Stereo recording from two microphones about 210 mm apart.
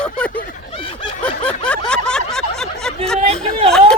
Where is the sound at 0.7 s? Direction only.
25° left (ahead or behind).